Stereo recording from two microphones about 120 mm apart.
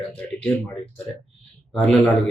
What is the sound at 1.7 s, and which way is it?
Speech, 5° left (ahead or behind).